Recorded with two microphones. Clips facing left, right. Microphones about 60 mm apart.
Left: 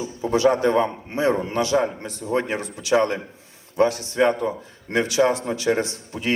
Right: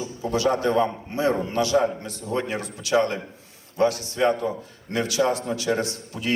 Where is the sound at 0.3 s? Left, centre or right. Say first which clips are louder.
Left 4 dB; left.